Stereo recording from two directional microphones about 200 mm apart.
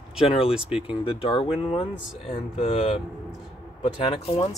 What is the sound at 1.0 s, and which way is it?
Speech, 25° left (ahead or behind).